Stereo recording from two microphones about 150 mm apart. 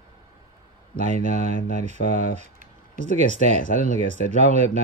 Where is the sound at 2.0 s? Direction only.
90° left.